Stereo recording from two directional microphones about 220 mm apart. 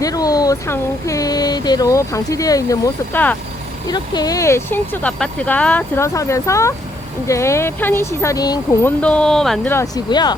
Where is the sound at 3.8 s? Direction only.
20° left (ahead or behind); by 9.7 s centre (ahead or behind).